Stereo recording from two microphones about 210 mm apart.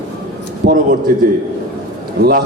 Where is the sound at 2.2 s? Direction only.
45° right (ahead or behind).